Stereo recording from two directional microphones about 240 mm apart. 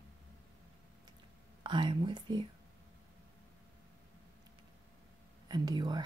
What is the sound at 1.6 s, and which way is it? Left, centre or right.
Speech, centre.